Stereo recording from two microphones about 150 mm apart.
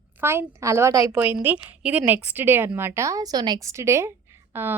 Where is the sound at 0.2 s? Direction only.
15° right (ahead or behind).